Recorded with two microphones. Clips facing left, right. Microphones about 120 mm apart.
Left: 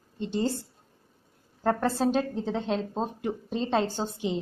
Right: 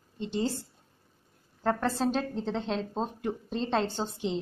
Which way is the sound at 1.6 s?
5° left (ahead or behind).